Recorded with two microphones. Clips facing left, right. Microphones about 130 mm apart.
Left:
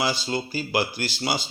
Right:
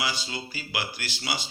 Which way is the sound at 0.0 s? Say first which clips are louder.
Left 6 dB; 35° left (ahead or behind).